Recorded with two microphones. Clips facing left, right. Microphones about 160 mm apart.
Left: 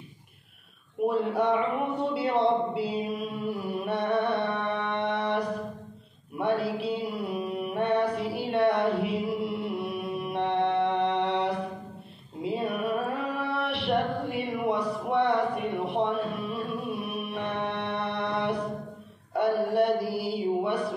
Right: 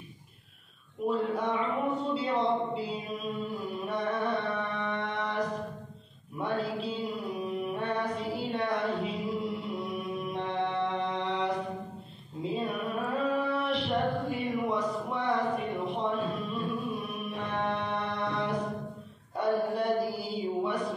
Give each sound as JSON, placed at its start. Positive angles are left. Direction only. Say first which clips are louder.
{"t": 1.0, "sound": "a man's voice", "louder": "left 4 dB", "side_deg": 65}
{"t": 3.2, "sound": "music", "louder": "left 3 dB", "side_deg": 65}
{"t": 6.3, "sound": "mantra", "louder": "left 4 dB", "side_deg": 70}
{"t": 12.4, "sound": "a sound", "louder": "left 3 dB", "side_deg": 65}